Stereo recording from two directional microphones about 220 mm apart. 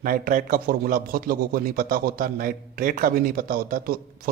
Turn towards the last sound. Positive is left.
turn(degrees=-40)  # may be behind; listen again after turning